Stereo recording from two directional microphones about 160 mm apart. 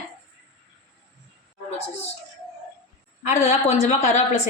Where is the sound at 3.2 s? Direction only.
45° left (ahead or behind).